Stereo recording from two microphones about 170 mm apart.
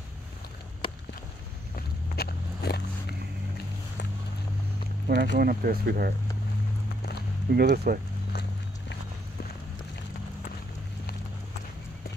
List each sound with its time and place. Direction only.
2.1 s walk: 70° left (ahead or behind)
5.0 s speech: 75° right (ahead or behind)
7.5 s speech: 65° right (ahead or behind)
8.3 s clip-clop: 70° left (ahead or behind)